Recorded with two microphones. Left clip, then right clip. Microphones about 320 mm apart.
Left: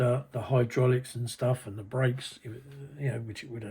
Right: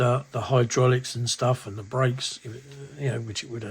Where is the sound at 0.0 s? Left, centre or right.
Centre.